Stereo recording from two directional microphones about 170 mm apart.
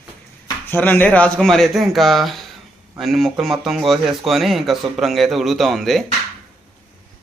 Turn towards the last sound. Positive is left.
turn(degrees=0)  # may be behind; listen again after turning